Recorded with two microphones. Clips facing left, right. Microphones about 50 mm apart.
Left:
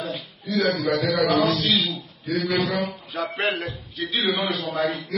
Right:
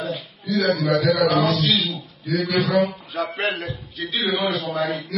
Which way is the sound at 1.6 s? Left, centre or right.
Left.